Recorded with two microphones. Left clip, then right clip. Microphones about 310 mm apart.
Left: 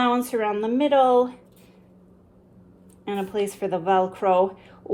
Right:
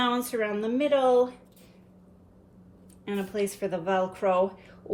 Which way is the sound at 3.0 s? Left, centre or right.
Left.